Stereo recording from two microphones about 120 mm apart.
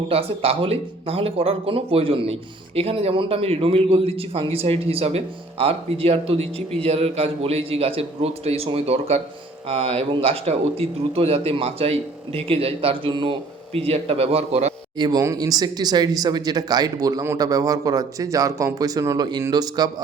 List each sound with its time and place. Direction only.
0.1 s a man's voice: 50° right (ahead or behind)
13.7 s a man's voice: 55° right (ahead or behind)
14.9 s speech: 35° right (ahead or behind)